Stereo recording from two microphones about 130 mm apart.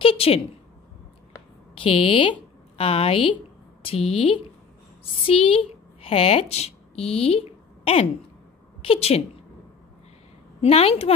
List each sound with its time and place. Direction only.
0.0 s a sound: 45° left (ahead or behind)
1.8 s a woman's voice: 40° left (ahead or behind)
10.6 s a woman's voice: 50° left (ahead or behind)